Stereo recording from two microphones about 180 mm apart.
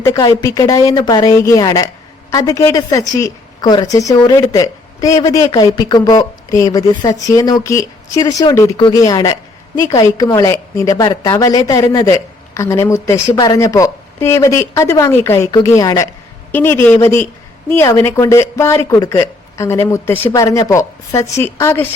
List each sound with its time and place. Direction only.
0.0 s a woman's voice: 15° left (ahead or behind)